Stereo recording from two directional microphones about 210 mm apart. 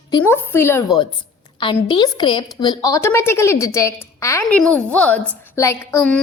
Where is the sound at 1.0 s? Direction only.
25° left (ahead or behind).